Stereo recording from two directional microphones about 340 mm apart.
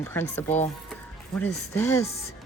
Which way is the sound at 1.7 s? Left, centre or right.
Centre.